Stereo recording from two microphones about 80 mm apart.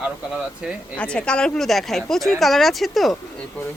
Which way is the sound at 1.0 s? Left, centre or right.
Centre.